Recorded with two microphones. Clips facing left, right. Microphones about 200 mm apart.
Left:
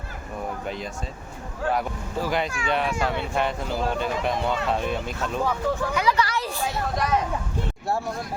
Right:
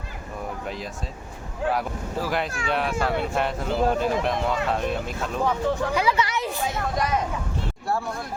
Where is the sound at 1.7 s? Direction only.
Centre (ahead or behind).